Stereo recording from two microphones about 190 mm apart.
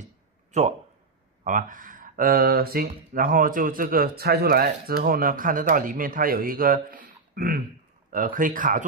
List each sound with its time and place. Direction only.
0.5 s speech: 35° right (ahead or behind)